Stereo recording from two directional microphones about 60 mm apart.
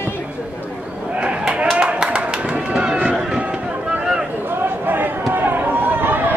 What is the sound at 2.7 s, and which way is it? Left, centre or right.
Run, centre.